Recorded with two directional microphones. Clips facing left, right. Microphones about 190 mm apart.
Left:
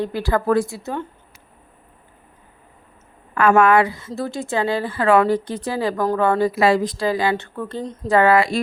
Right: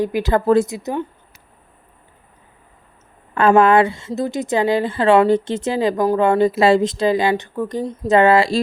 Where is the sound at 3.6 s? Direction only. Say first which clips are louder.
Right 2 dB; 30° right (ahead or behind); by 7.9 s 10° right (ahead or behind).